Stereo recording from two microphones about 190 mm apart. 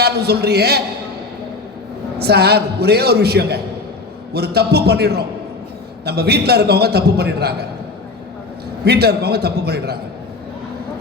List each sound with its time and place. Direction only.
0.0 s a man's voice: 60° right (ahead or behind)
2.1 s a man's voice: 55° right (ahead or behind)
8.8 s a man's voice: 55° right (ahead or behind)